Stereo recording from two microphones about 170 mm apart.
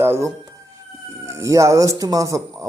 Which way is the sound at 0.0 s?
15° right (ahead or behind).